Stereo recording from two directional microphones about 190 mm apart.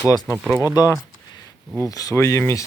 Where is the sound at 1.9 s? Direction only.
20° left (ahead or behind).